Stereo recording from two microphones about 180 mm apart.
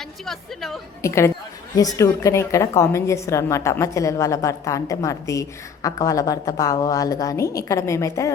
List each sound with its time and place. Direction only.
0.3 s a woman's voice: centre (ahead or behind)
1.0 s a woman's voice: 15° left (ahead or behind)